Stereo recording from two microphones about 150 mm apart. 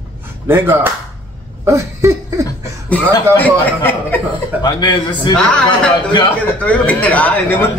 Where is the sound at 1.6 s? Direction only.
20° right (ahead or behind).